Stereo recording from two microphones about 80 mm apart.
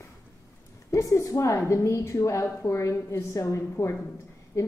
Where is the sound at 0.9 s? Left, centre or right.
Left.